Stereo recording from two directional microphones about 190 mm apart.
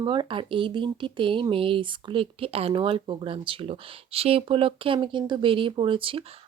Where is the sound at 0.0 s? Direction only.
25° right (ahead or behind).